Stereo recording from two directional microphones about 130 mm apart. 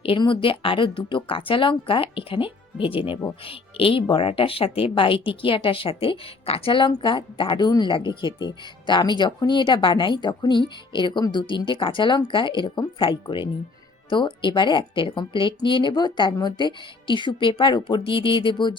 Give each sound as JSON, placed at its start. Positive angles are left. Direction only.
{"t": 0.0, "sound": "a woman's voice", "side_deg": 40}